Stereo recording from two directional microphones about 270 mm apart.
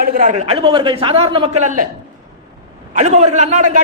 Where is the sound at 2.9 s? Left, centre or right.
Right.